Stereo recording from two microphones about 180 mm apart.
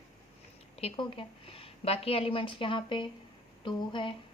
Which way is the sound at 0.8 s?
30° left (ahead or behind).